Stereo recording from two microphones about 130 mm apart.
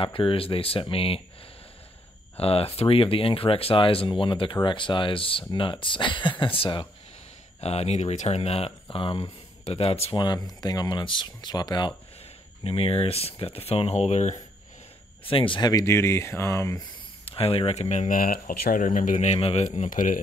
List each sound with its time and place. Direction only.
0.0 s speech: 45° left (ahead or behind)
2.3 s speech: 50° left (ahead or behind)
7.6 s speech: 55° left (ahead or behind)
10.1 s speech: 35° left (ahead or behind)
12.6 s speech: 50° left (ahead or behind)
15.2 s speech: 40° left (ahead or behind); by 16.8 s 25° left (ahead or behind)
17.2 s speech: 50° left (ahead or behind); by 20.2 s 90° left